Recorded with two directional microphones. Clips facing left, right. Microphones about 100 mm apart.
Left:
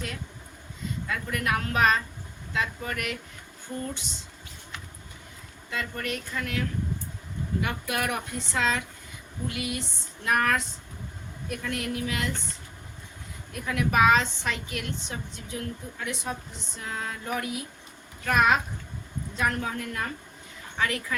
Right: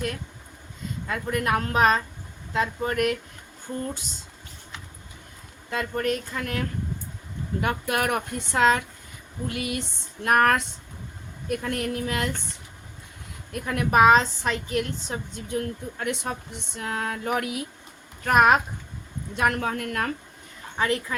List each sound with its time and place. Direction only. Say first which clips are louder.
1.0 s a woman's voice: right 4 dB; 35° right (ahead or behind)
5.7 s a woman's voice: right 6 dB; 40° right (ahead or behind)
13.5 s a woman's voice: right 3 dB; 45° right (ahead or behind)
15.4 s a sound: right 7 dB; 55° right (ahead or behind)
18.3 s speech: right 4 dB; 50° right (ahead or behind)
19.3 s a sound: right 4 dB; 60° right (ahead or behind)
20.7 s a woman's voice: right 3 dB; 30° right (ahead or behind)